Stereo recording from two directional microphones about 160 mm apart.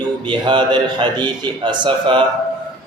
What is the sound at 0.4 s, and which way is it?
A man's voice, 30° right (ahead or behind).